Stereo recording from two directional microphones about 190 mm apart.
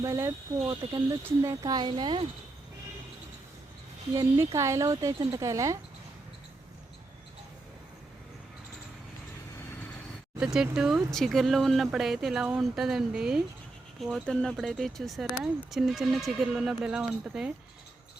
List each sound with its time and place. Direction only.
0.0 s speech: 15° right (ahead or behind)
4.1 s speech: 15° right (ahead or behind)
10.4 s speech: 5° right (ahead or behind)